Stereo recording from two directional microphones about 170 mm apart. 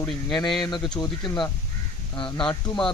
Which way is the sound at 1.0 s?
20° left (ahead or behind).